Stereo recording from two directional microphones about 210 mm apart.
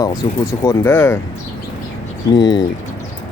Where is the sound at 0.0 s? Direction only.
20° left (ahead or behind).